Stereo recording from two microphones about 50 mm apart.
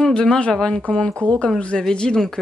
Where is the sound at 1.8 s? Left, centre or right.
Centre.